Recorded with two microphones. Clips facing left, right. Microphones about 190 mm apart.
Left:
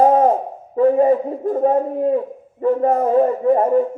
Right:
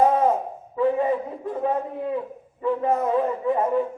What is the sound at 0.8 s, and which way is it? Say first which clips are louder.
A man's voice: left 8 dB; 45° left (ahead or behind).